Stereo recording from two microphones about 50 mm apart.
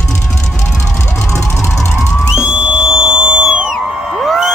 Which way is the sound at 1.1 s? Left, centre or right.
Centre.